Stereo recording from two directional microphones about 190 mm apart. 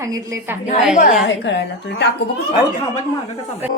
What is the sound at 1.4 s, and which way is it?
Speech, 70° left (ahead or behind).